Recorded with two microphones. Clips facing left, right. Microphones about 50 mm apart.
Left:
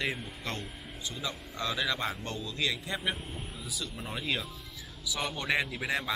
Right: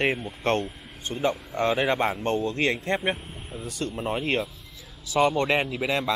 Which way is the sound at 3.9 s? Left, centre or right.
Right.